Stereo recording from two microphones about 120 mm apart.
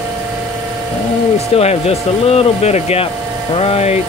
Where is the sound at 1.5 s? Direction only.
55° left (ahead or behind).